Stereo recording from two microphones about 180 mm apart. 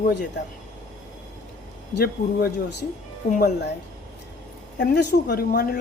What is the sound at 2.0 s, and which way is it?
Speech, 65° left (ahead or behind).